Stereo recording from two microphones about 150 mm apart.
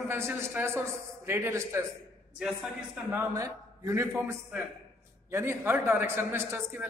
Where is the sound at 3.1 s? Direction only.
20° right (ahead or behind).